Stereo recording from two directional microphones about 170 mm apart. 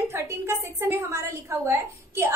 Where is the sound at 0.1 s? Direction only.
15° right (ahead or behind).